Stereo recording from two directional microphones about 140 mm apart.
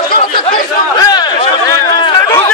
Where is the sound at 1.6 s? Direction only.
20° left (ahead or behind).